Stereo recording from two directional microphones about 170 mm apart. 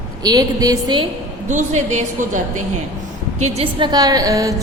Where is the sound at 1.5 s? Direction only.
45° right (ahead or behind).